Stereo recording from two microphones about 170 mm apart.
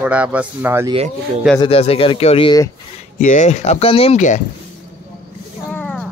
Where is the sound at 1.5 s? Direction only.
35° left (ahead or behind).